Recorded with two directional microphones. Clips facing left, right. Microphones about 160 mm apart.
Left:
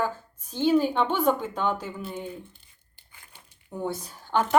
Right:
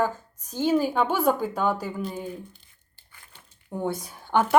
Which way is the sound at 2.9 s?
15° left (ahead or behind).